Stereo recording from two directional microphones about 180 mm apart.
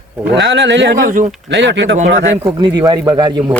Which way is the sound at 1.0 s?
50° right (ahead or behind).